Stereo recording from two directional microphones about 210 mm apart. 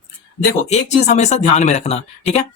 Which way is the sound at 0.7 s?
30° left (ahead or behind).